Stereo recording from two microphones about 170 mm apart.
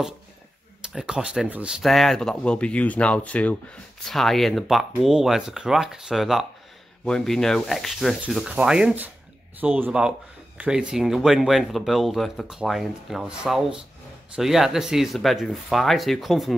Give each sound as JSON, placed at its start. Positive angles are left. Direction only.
{"t": 0.8, "sound": "speech", "side_deg": -5}